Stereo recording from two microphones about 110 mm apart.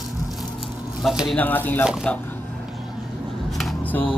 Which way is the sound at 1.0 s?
Centre (ahead or behind).